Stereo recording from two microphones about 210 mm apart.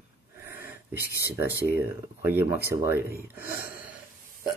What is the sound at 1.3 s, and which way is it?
Speech, 10° right (ahead or behind).